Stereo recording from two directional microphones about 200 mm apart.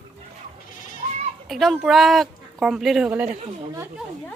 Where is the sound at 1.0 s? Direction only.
40° right (ahead or behind).